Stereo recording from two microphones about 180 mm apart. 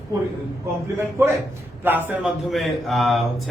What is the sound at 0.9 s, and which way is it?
Speech, 15° right (ahead or behind).